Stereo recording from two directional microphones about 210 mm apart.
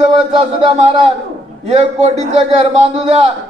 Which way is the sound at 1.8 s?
30° right (ahead or behind).